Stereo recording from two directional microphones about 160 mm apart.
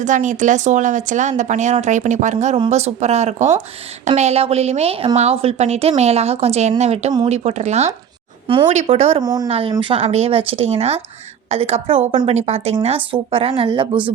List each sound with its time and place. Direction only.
0.0 s a woman's voice: 50° right (ahead or behind)
9.2 s speech: 25° right (ahead or behind)
9.5 s a woman's voice: 35° right (ahead or behind)